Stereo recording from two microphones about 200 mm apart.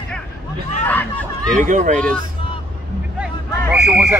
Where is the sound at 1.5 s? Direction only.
40° right (ahead or behind).